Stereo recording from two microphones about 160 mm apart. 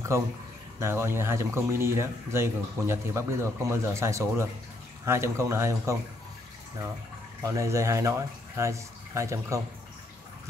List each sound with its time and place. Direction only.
0.7 s speech: 15° right (ahead or behind)
7.4 s speech: 20° right (ahead or behind)